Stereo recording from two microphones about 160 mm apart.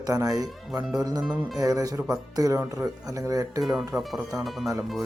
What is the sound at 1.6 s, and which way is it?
Speech, 20° right (ahead or behind).